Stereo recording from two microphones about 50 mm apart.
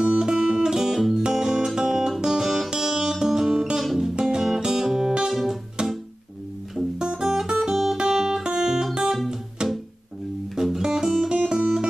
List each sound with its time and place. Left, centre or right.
0.0 s music: centre
5.3 s guitar: centre
5.8 s music: centre
7.0 s music: centre
8.9 s guitar: centre
10.5 s music: centre
11.5 s guitar: centre